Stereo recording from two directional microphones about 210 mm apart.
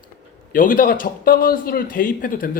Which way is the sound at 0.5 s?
40° left (ahead or behind).